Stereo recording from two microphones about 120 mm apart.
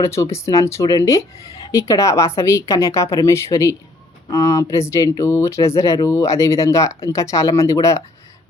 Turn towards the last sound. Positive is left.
turn(degrees=25)  # may be behind; listen again after turning